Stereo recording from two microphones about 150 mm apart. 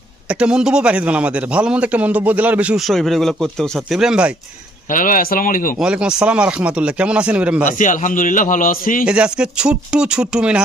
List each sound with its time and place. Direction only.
0.3 s a man's voice: 5° right (ahead or behind)
4.9 s speech: 65° left (ahead or behind)
5.8 s a man's voice: 5° right (ahead or behind)
7.7 s a man's voice: 60° left (ahead or behind)
9.0 s a man's voice: 5° right (ahead or behind)